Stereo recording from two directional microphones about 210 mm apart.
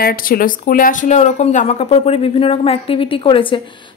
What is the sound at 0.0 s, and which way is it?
Speech, 45° left (ahead or behind).